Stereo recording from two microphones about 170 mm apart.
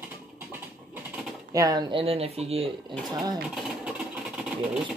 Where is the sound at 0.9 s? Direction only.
5° right (ahead or behind).